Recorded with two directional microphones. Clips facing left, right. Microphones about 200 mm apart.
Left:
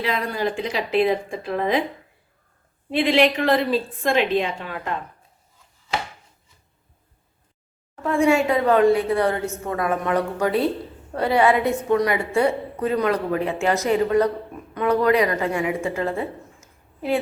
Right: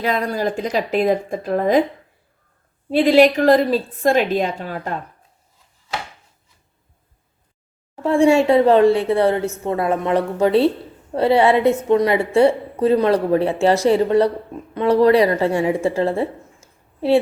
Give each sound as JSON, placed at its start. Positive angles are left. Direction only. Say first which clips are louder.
{"t": 0.0, "sound": "speech", "louder": "right 4 dB", "side_deg": -45}
{"t": 2.9, "sound": "a woman's voice", "louder": "right 6 dB", "side_deg": -40}
{"t": 8.0, "sound": "a woman's voice", "louder": "right 5 dB", "side_deg": -30}